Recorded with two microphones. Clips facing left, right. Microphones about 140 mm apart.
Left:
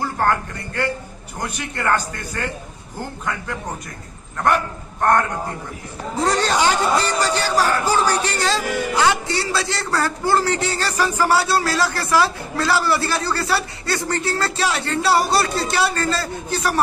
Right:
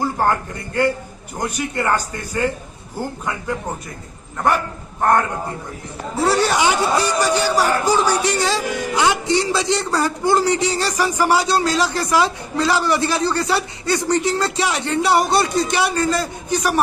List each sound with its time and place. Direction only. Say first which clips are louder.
0.2 s a man's voice: right 1 dB; 15° right (ahead or behind)
6.1 s a man's voice: right 2 dB; 10° right (ahead or behind)